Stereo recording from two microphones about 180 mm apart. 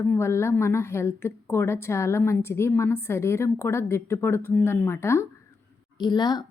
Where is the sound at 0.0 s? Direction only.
15° left (ahead or behind).